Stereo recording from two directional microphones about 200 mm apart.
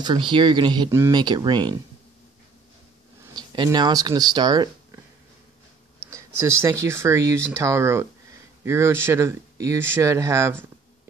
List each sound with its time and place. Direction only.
0.0 s speech: 25° right (ahead or behind)
3.3 s speech: 20° right (ahead or behind)
6.0 s speech: 15° right (ahead or behind)